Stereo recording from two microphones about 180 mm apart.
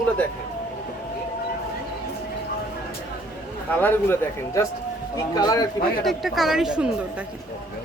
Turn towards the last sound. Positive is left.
turn(degrees=-5)  # may be behind; listen again after turning